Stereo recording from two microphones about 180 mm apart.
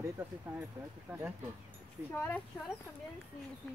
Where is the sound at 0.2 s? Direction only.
10° right (ahead or behind).